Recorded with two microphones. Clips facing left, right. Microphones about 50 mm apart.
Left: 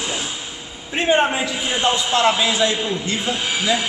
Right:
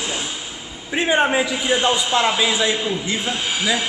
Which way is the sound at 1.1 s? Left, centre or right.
Centre.